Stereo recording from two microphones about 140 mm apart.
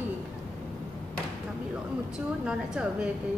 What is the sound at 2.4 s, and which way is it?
Speech, 5° right (ahead or behind).